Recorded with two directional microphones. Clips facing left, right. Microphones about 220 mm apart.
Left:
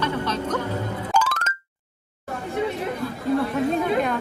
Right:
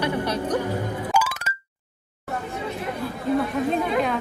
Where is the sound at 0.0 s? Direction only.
10° right (ahead or behind).